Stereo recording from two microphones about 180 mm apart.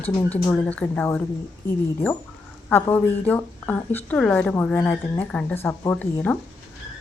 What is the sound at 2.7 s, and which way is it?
A woman's voice, 10° left (ahead or behind).